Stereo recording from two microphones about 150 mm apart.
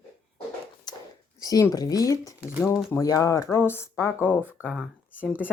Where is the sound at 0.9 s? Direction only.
25° left (ahead or behind).